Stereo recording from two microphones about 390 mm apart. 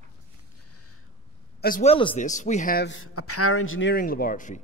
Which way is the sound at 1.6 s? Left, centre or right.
Left.